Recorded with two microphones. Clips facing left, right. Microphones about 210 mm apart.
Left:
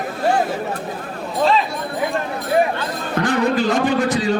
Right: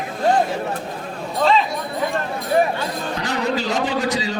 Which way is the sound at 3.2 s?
55° left (ahead or behind).